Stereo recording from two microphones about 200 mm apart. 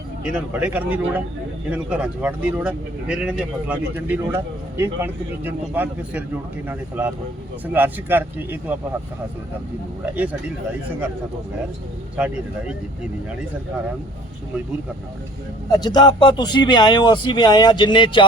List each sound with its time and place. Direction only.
0.3 s speech: 10° right (ahead or behind)
12.2 s speech: 5° right (ahead or behind)
15.7 s speech: 20° left (ahead or behind)